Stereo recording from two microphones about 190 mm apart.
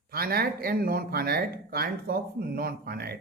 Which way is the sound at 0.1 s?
55° right (ahead or behind).